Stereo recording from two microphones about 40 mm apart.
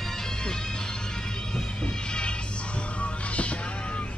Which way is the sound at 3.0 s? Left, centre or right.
Left.